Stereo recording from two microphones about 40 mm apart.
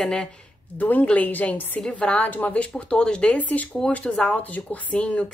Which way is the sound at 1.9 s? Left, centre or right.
Left.